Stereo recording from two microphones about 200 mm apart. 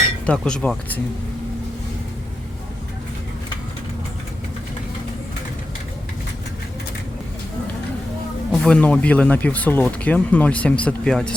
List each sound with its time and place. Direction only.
0.3 s speech: 5° left (ahead or behind)
8.5 s speech: 5° left (ahead or behind)